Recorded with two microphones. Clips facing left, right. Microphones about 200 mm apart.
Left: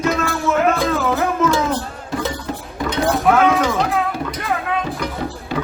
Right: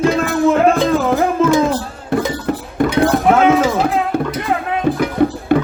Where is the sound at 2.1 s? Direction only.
60° right (ahead or behind).